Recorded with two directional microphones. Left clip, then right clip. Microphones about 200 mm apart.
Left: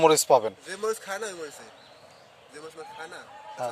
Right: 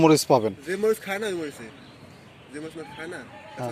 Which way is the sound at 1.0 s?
30° left (ahead or behind).